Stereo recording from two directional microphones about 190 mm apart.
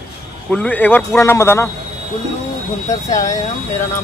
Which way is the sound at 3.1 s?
15° left (ahead or behind).